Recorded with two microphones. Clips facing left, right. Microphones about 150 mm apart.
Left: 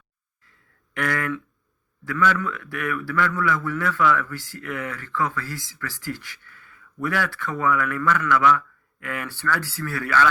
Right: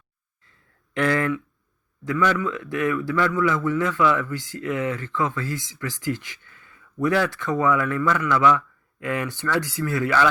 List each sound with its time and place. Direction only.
0.9 s a man's voice: 25° right (ahead or behind)